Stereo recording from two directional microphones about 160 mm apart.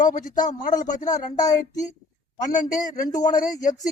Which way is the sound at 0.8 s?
55° left (ahead or behind).